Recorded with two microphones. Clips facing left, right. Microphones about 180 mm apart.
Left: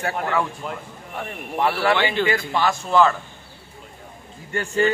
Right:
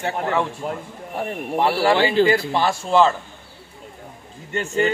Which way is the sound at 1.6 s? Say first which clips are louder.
Right 2 dB; 30° right (ahead or behind).